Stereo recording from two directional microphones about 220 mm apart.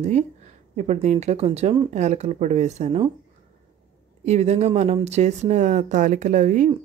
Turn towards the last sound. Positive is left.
turn(degrees=-35)  # may be behind; listen again after turning